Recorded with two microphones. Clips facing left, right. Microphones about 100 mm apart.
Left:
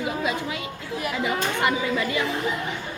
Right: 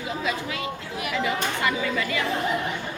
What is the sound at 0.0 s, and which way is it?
Chatter, 20° left (ahead or behind).